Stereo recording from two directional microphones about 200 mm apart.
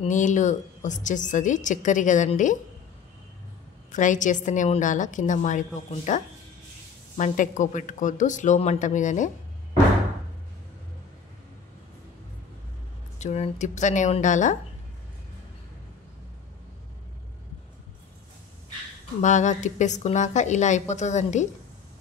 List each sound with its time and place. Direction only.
0.0 s a woman's voice: 40° left (ahead or behind)
3.9 s a woman's voice: 40° left (ahead or behind)
13.2 s a woman's voice: 35° left (ahead or behind)
19.2 s a woman's voice: 35° left (ahead or behind)